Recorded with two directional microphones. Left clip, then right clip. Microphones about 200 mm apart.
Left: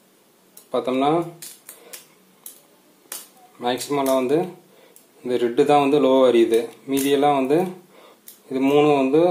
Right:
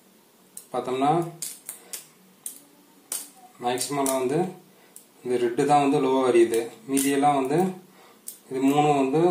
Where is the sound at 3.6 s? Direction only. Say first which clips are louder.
Left 3 dB; 40° left (ahead or behind).